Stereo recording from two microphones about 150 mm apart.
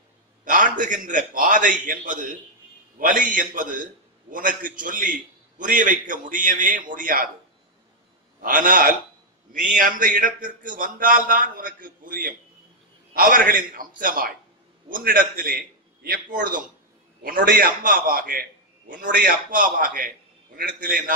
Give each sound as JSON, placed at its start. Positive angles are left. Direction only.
{"t": 0.5, "sound": "a man's voice", "side_deg": -60}
{"t": 8.4, "sound": "a man's voice", "side_deg": -65}